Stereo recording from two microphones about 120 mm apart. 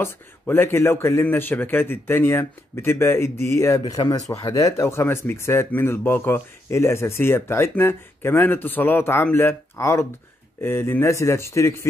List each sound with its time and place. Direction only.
0.0 s speech: 20° left (ahead or behind)